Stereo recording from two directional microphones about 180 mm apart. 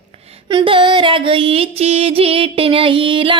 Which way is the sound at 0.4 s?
25° right (ahead or behind).